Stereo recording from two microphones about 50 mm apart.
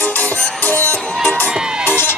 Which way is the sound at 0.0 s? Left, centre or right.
Left.